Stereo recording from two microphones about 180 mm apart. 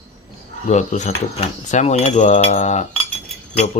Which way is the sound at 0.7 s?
40° left (ahead or behind).